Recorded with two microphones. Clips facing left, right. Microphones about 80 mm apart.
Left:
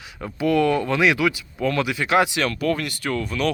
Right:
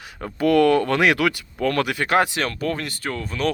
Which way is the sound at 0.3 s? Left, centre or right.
Right.